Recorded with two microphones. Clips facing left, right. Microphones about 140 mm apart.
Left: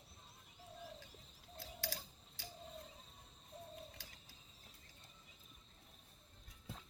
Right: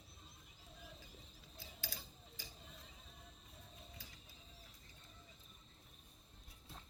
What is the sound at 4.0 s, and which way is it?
Mechanisms, 75° left (ahead or behind).